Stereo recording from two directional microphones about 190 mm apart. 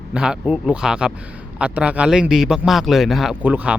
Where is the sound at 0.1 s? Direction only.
5° right (ahead or behind).